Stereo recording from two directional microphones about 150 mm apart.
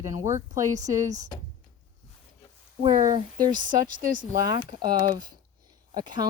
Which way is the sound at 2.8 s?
55° right (ahead or behind).